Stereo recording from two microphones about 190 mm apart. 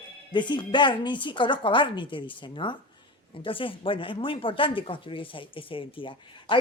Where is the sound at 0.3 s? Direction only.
25° left (ahead or behind).